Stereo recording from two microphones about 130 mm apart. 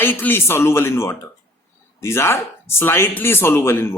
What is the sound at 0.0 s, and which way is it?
A man's voice, 15° left (ahead or behind).